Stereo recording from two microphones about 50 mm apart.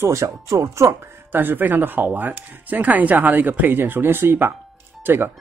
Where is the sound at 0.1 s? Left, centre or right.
Right.